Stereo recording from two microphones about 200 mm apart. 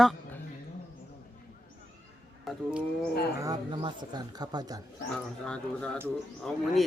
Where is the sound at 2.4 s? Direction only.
Centre (ahead or behind).